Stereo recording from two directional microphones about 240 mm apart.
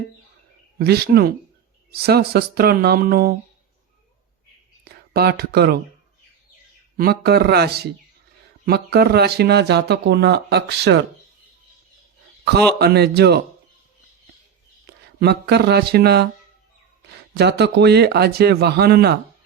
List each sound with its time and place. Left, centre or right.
0.8 s speech: right
5.1 s speech: right
6.9 s speech: right
12.5 s speech: right
14.8 s speech: right
17.3 s speech: right